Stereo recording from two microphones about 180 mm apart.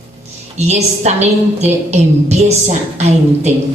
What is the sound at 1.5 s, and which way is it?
Speech, 40° right (ahead or behind).